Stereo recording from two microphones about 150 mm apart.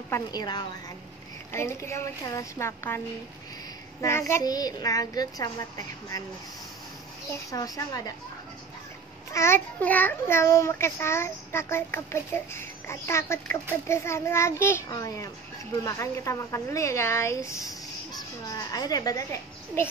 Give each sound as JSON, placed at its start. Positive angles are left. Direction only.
{"t": 0.1, "sound": "speech", "side_deg": 25}
{"t": 1.5, "sound": "a child's voice", "side_deg": 15}
{"t": 4.0, "sound": "speech", "side_deg": 20}
{"t": 7.5, "sound": "speech", "side_deg": 25}
{"t": 9.3, "sound": "a child's voice", "side_deg": 15}